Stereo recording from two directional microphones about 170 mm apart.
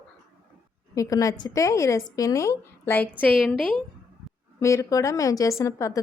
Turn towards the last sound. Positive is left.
turn(degrees=20)  # may be behind; listen again after turning